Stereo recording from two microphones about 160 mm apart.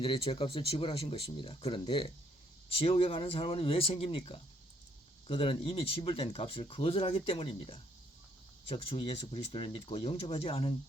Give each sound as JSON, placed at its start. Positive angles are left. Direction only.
{"t": 0.0, "sound": "speech", "side_deg": 35}